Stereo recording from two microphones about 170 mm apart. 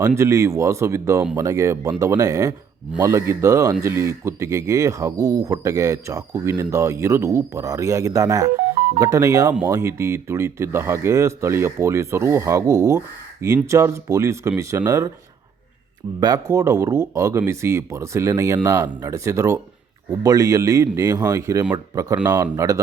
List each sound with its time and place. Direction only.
0.2 s speech: 15° right (ahead or behind)
16.2 s speech: 20° right (ahead or behind)